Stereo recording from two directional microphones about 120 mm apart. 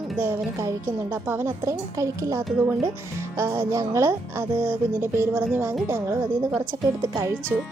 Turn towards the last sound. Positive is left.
turn(degrees=-25)  # may be behind; listen again after turning